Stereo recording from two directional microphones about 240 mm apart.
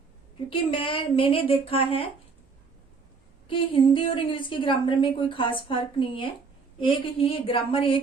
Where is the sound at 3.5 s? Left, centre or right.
Left.